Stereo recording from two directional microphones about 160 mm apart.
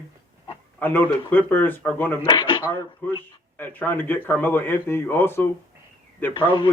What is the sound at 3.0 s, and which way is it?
Speech, 10° left (ahead or behind).